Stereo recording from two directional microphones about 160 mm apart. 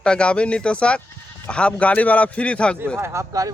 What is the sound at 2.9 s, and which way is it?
Speech, 15° right (ahead or behind).